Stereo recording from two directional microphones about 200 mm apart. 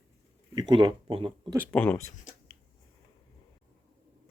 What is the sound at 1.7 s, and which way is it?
Speech, 10° left (ahead or behind).